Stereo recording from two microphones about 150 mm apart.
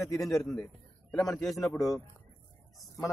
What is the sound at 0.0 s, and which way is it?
Speech, 20° left (ahead or behind).